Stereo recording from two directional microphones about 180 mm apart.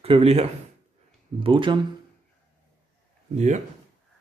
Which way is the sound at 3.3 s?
40° right (ahead or behind).